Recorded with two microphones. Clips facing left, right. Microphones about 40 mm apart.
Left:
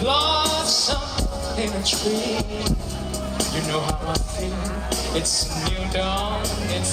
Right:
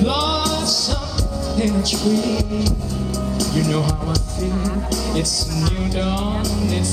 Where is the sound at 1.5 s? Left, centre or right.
Left.